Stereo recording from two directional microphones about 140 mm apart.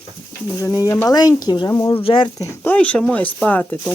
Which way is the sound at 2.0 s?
40° left (ahead or behind).